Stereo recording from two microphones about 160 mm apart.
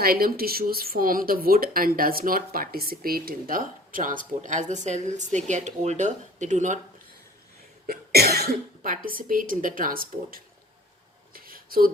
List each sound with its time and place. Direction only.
0.0 s speech: 70° right (ahead or behind); by 6.7 s 50° right (ahead or behind)
7.9 s speech: 80° right; by 10.4 s 65° right (ahead or behind)
11.3 s a sound: 65° right (ahead or behind)